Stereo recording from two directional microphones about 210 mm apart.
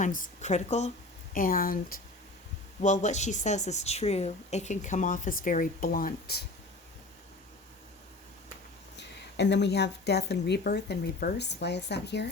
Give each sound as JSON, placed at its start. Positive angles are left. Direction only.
{"t": 0.0, "sound": "a woman's voice", "side_deg": 35}
{"t": 9.0, "sound": "a woman's voice", "side_deg": 55}